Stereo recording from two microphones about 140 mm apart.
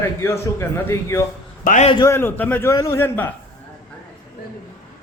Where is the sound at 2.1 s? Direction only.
15° left (ahead or behind).